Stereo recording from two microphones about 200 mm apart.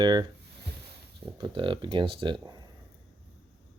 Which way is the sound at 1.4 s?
25° right (ahead or behind).